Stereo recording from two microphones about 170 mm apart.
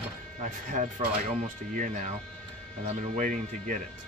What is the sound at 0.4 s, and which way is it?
Speech, 45° right (ahead or behind).